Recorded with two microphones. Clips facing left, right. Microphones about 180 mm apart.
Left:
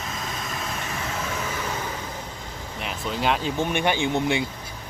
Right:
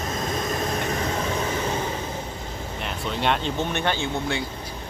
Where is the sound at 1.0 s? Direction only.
35° right (ahead or behind).